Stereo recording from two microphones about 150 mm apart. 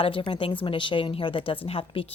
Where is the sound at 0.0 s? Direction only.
35° left (ahead or behind).